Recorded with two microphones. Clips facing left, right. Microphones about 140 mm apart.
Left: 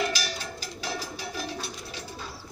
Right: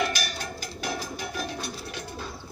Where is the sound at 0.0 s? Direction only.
55° right (ahead or behind).